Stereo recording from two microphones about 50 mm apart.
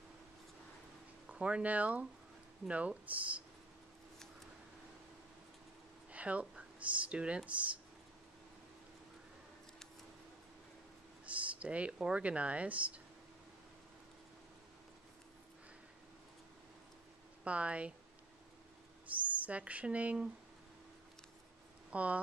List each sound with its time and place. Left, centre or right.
1.3 s speech: right
6.1 s a sound: right
6.8 s speech: right
11.2 s speech: right
17.5 s speech: right
19.2 s speech: right
21.9 s speech: right